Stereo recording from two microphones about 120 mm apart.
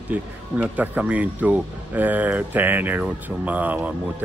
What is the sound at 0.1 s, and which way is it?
Speech, 10° right (ahead or behind).